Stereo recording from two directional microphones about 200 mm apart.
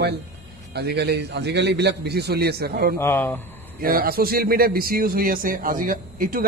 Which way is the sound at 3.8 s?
45° right (ahead or behind).